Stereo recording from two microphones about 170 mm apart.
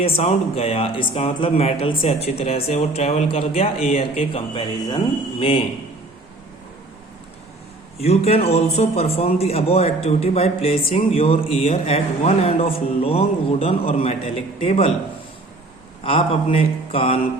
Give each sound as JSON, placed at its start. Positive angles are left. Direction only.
{"t": 0.0, "sound": "a man's voice", "side_deg": 35}
{"t": 7.9, "sound": "a man's voice", "side_deg": 35}
{"t": 16.0, "sound": "a man's voice", "side_deg": 30}